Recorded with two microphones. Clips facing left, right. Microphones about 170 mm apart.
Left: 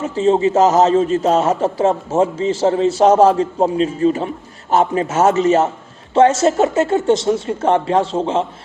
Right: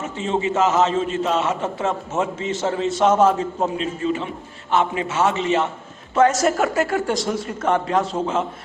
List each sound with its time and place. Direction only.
0.1 s a man's voice: 35° left (ahead or behind)
6.1 s speech: 30° left (ahead or behind)